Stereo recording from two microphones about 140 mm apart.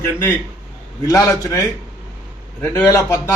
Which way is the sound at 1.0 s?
25° left (ahead or behind).